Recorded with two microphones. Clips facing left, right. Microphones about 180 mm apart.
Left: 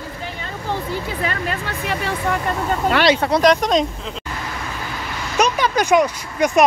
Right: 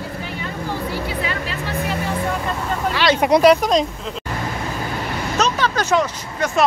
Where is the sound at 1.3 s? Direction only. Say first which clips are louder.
Left 1 dB; 50° left (ahead or behind).